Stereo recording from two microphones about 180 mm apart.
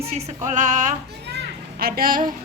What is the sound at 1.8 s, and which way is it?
Speech, 55° right (ahead or behind).